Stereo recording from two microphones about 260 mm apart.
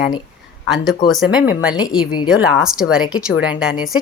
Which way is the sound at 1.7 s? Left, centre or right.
Centre.